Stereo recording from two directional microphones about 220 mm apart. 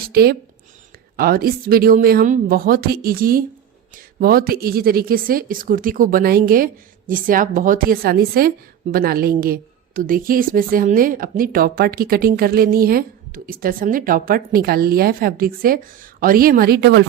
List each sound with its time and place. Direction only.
0.0 s a woman's voice: 45° right (ahead or behind)